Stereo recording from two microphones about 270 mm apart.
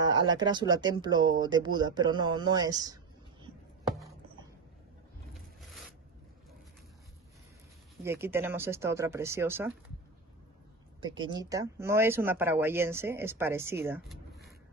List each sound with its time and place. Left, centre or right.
0.0 s speech: centre
8.0 s speech: centre
11.0 s speech: centre